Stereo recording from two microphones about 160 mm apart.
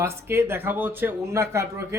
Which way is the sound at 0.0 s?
15° right (ahead or behind).